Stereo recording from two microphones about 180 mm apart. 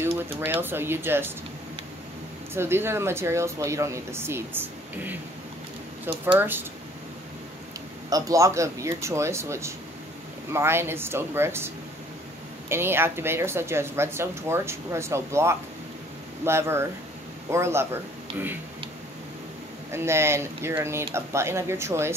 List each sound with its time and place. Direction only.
0.0 s speech: 10° right (ahead or behind)
2.5 s a woman's voice: 15° right (ahead or behind)
8.1 s a woman's voice: 20° right (ahead or behind)
19.9 s a woman's voice: 15° right (ahead or behind)